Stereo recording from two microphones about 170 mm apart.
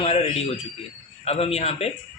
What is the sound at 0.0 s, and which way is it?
A man's voice, 35° left (ahead or behind).